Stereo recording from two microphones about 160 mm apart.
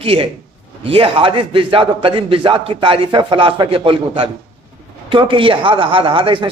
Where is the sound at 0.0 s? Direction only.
35° right (ahead or behind).